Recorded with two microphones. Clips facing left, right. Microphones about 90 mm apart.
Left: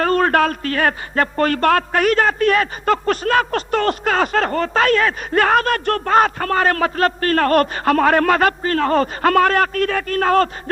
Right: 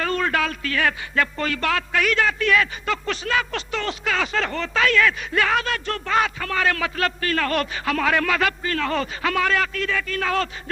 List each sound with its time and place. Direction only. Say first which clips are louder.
0.0 s a man's voice: left 7 dB; 45° left (ahead or behind)